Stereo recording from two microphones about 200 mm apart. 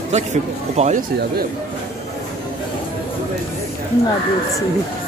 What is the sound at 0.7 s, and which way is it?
Speech, 35° right (ahead or behind).